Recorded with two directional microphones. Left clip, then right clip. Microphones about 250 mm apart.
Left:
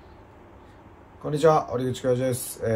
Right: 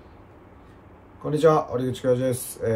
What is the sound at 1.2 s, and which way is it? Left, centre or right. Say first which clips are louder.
Speech: right 1 dB; centre.